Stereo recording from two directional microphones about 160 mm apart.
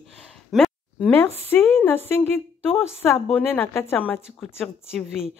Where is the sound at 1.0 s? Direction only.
15° left (ahead or behind).